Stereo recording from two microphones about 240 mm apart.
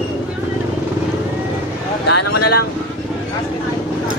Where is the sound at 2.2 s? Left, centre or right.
Left.